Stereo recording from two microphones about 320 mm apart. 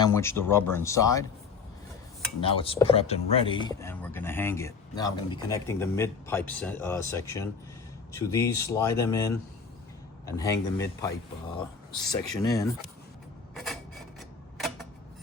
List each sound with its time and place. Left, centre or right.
0.0 s speech: centre
2.4 s speech: centre
12.1 s speech: centre
13.5 s a sound: centre